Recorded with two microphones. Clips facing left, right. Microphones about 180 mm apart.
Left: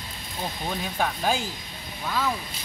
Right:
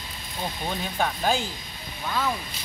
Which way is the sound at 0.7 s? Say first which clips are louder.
Even; centre (ahead or behind).